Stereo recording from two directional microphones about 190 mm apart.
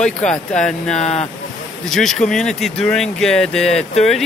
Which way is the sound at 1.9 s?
Centre (ahead or behind).